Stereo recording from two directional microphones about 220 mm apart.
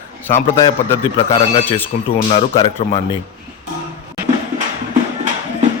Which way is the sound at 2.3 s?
25° left (ahead or behind).